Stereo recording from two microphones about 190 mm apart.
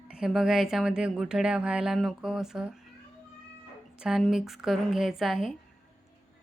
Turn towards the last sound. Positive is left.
turn(degrees=0)  # may be behind; listen again after turning